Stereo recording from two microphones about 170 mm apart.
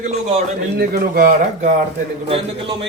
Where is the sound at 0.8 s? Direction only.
55° right (ahead or behind).